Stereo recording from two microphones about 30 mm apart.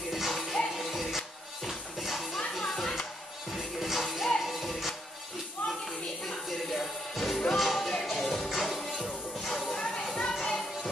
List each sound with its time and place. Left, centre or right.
0.1 s music: centre
2.6 s music: centre
3.5 s music: centre
5.7 s music: centre
9.5 s a sound: centre
10.4 s music: centre